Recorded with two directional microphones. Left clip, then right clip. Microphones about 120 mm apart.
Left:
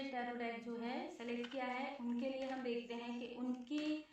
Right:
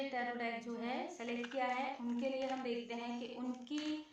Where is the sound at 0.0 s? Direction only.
40° right (ahead or behind).